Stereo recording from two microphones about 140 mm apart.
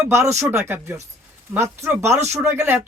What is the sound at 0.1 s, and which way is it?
Speech, 20° right (ahead or behind).